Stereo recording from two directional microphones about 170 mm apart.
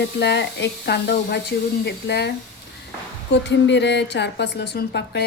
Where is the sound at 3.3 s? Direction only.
90° left; by 5.2 s 75° left (ahead or behind).